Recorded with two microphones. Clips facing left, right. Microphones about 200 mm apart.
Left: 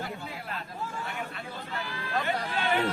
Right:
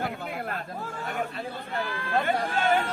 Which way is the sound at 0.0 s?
60° right (ahead or behind).